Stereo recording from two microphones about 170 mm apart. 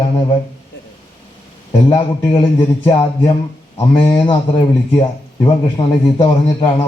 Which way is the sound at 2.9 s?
35° left (ahead or behind).